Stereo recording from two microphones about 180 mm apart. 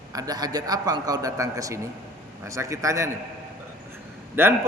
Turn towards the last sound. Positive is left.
turn(degrees=-10)  # may be behind; listen again after turning